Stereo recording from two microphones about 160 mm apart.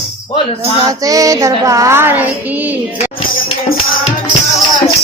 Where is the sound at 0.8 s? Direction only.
20° right (ahead or behind).